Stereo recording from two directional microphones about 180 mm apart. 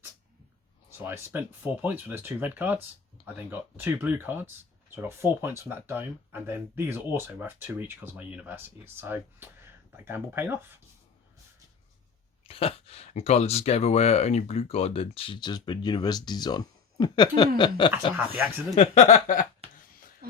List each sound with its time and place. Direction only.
0.9 s speech: 15° right (ahead or behind)
12.5 s speech: 30° left (ahead or behind)
18.8 s speech: 40° left (ahead or behind)